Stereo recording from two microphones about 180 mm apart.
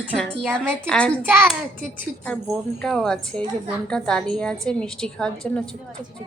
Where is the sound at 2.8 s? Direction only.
5° left (ahead or behind).